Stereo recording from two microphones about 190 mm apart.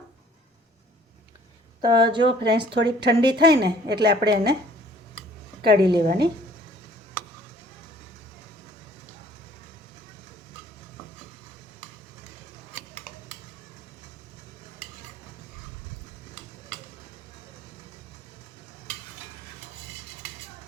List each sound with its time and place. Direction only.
2.0 s speech: 25° right (ahead or behind)
2.4 s a woman's voice: 60° right (ahead or behind)
5.6 s a woman's voice: 60° right (ahead or behind)